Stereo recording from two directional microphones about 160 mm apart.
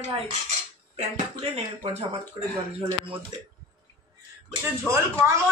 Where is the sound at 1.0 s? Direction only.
40° right (ahead or behind).